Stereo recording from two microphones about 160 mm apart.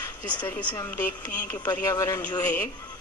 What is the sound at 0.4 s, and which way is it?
Speech, 10° left (ahead or behind).